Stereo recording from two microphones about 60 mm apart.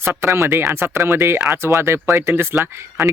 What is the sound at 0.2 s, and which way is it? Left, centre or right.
Speech, right.